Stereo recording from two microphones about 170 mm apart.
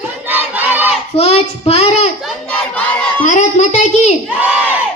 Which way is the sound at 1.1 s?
40° left (ahead or behind).